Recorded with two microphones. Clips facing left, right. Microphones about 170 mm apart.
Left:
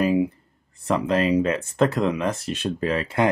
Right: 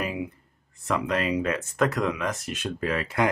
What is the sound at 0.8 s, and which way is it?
Speech, 30° left (ahead or behind).